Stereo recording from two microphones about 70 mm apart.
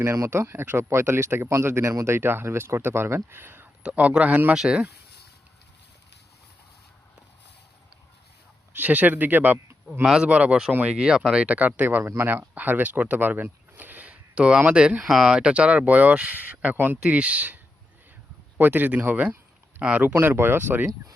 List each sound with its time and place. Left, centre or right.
0.0 s speech: right
3.8 s speech: centre
4.5 s speech: centre
8.7 s speech: right
10.0 s speech: centre
10.2 s speech: centre
10.9 s speech: centre
11.4 s speech: right
15.0 s speech: centre
20.2 s speech: right